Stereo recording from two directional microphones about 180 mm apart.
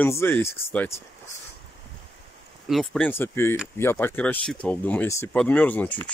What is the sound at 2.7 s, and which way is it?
Speech, centre (ahead or behind).